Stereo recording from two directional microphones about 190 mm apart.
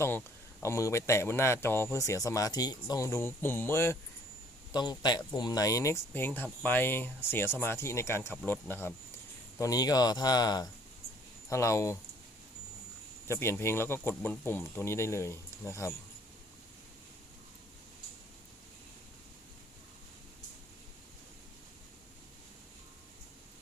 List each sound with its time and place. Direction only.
0.6 s speech: 15° left (ahead or behind)
13.2 s speech: 15° left (ahead or behind)